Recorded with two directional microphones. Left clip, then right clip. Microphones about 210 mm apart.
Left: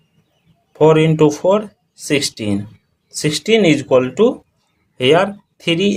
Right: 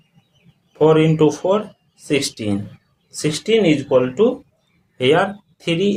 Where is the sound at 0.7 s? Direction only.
35° left (ahead or behind).